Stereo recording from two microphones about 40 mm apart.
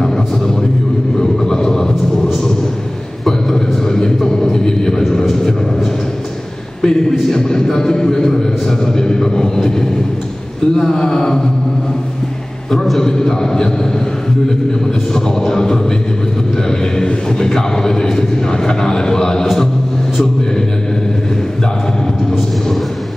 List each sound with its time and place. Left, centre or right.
1.2 s vehicle: centre
3.3 s a sound: centre
5.2 s vehicle: centre
6.8 s a man's voice: centre
12.7 s a man's voice: centre
15.1 s a man's voice: centre